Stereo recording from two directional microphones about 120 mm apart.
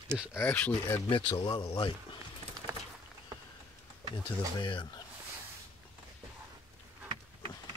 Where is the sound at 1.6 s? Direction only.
50° left (ahead or behind).